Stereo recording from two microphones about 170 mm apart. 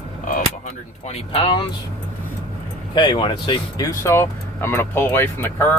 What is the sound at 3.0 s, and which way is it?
Speech, 25° left (ahead or behind).